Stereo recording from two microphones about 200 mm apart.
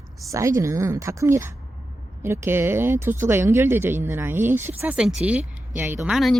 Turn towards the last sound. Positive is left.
turn(degrees=0)  # may be behind; listen again after turning